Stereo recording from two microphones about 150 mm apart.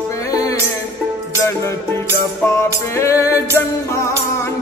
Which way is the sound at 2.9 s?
20° left (ahead or behind).